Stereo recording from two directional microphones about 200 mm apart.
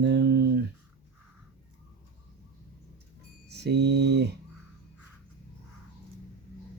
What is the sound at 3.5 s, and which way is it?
Speech, 55° right (ahead or behind).